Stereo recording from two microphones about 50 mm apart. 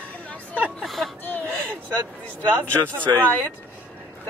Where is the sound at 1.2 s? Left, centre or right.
Left.